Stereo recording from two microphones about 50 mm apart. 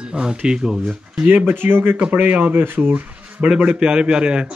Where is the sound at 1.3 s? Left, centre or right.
Right.